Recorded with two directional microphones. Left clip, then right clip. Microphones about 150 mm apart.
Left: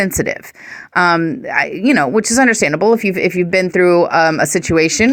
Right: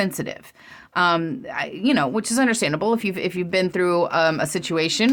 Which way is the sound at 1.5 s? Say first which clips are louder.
Left 10 dB; 40° left (ahead or behind).